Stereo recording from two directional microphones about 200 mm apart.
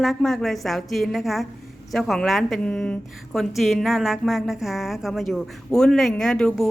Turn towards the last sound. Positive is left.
turn(degrees=5)  # may be behind; listen again after turning